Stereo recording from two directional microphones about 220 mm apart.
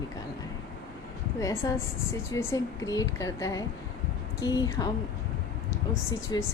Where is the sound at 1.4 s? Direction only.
15° left (ahead or behind).